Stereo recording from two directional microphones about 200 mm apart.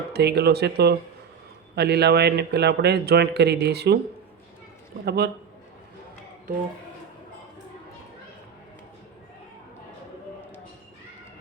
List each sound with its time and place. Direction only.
0.1 s a man's voice: 55° right (ahead or behind)
5.0 s a man's voice: 55° right (ahead or behind)